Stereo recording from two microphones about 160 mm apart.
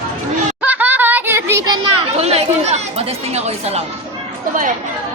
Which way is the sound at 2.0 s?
40° right (ahead or behind).